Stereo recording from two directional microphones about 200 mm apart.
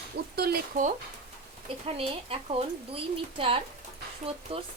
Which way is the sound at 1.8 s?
30° right (ahead or behind).